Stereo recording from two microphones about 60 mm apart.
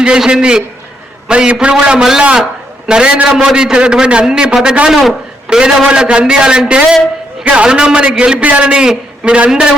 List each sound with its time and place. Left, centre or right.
0.0 s a man's voice: centre